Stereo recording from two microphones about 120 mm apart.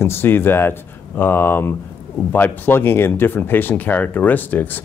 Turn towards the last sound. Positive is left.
turn(degrees=15)  # may be behind; listen again after turning